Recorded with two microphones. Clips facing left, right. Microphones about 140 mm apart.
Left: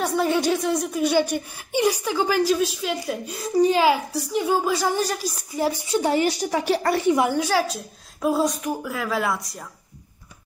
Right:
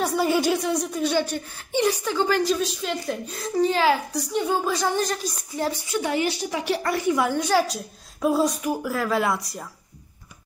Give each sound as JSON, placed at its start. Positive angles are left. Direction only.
{"t": 0.0, "sound": "a woman's voice", "side_deg": 0}
{"t": 5.9, "sound": "a woman's voice", "side_deg": 35}
{"t": 7.1, "sound": "a woman's voice", "side_deg": 20}
{"t": 7.3, "sound": "a woman's voice", "side_deg": 0}